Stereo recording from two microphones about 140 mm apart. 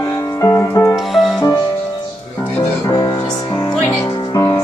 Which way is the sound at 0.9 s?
Centre (ahead or behind).